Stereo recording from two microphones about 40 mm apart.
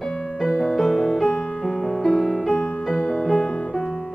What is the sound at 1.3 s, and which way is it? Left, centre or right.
Music, centre.